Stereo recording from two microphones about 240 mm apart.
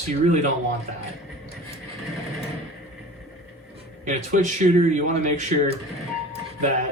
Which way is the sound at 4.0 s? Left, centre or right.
Right.